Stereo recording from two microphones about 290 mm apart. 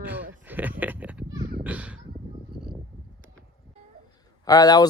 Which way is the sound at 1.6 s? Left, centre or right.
Centre.